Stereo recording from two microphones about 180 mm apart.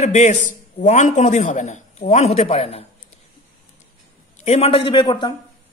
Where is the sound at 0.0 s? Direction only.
40° left (ahead or behind).